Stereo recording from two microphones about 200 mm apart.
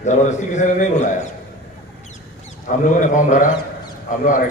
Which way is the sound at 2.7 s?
40° left (ahead or behind).